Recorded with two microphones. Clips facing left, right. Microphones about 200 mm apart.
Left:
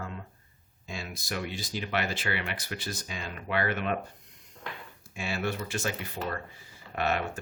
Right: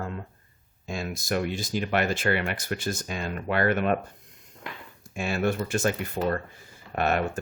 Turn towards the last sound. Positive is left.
turn(degrees=-50)  # may be behind; listen again after turning